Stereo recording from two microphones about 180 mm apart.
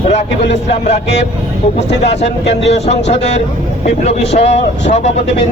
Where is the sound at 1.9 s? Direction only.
70° left (ahead or behind).